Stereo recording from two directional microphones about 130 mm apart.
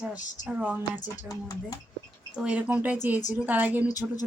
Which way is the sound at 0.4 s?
15° right (ahead or behind).